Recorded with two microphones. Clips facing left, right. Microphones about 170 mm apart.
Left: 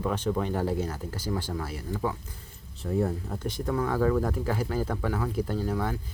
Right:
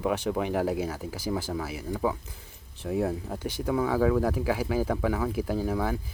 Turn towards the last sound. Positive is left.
turn(degrees=-5)  # may be behind; listen again after turning